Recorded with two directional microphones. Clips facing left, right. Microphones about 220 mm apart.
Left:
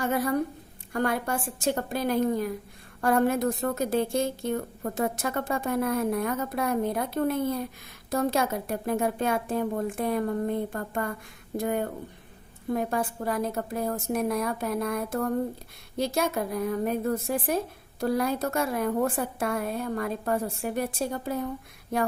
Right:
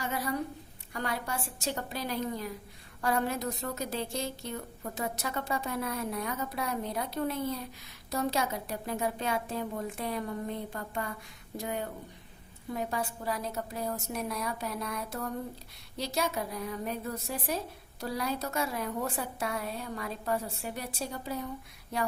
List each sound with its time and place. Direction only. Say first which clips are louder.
0.0 s a woman's voice: left 7 dB; 50° left (ahead or behind)